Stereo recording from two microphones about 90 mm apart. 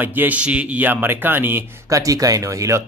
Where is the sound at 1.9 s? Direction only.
40° right (ahead or behind).